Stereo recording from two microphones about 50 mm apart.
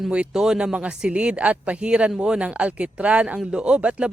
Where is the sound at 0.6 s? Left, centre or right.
Right.